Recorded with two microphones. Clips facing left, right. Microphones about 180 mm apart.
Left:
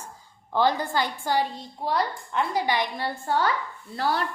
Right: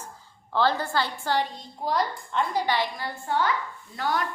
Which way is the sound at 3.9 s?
30° left (ahead or behind).